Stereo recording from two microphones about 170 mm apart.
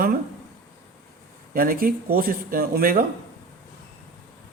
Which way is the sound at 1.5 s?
60° right (ahead or behind).